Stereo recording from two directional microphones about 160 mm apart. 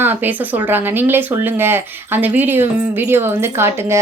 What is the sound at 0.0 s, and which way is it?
Speech, 10° right (ahead or behind).